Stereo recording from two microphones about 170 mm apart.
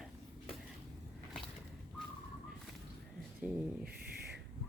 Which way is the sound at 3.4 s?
5° right (ahead or behind).